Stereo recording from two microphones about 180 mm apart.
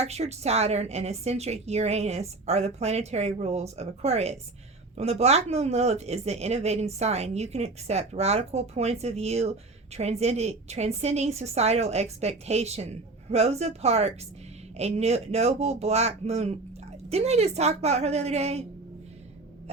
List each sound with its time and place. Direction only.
0.0 s speech: 35° right (ahead or behind)